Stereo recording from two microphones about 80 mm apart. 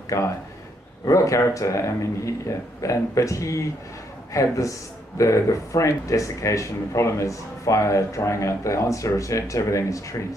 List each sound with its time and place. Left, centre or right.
0.1 s speech: left